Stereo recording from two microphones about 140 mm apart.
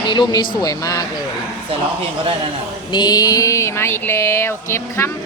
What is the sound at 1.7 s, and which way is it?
Speech, 45° right (ahead or behind).